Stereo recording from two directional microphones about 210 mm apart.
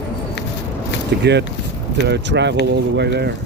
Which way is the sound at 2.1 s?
55° right (ahead or behind).